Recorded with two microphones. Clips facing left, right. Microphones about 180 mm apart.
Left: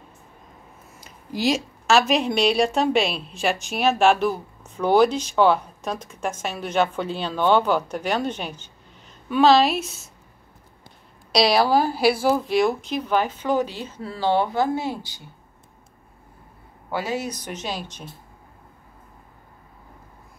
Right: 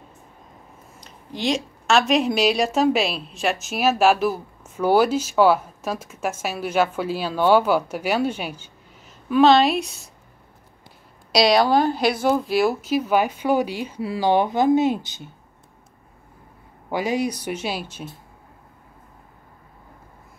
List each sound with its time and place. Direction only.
1.0 s a woman's voice: 5° left (ahead or behind)
11.3 s a woman's voice: 5° left (ahead or behind); by 15.2 s 20° right (ahead or behind)
16.9 s a woman's voice: 15° right (ahead or behind)